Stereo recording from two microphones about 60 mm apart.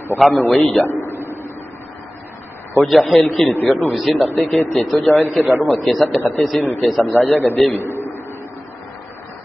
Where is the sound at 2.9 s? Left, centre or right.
Centre.